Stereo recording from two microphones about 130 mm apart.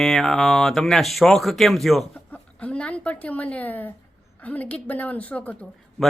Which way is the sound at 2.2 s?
10° left (ahead or behind).